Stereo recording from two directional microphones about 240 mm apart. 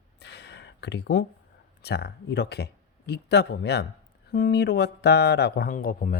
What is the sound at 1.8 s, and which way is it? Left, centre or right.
Speech, left.